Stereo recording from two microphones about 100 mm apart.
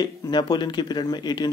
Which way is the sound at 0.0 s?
45° left (ahead or behind).